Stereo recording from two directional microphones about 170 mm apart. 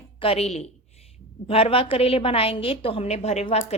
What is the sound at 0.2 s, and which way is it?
A woman's voice, 35° left (ahead or behind).